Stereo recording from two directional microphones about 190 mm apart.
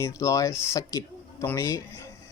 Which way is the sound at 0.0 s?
15° left (ahead or behind).